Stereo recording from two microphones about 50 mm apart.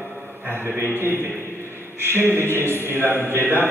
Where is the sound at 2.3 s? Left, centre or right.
Right.